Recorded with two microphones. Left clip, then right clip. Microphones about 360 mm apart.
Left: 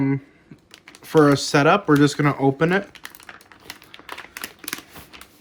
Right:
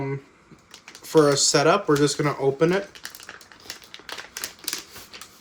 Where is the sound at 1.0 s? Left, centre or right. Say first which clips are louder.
Left 1 dB; left.